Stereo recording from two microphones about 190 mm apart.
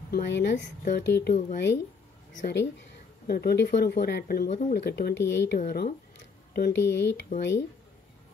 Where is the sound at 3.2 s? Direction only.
55° left (ahead or behind).